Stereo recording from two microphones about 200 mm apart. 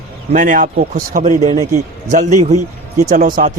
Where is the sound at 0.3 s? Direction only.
40° right (ahead or behind).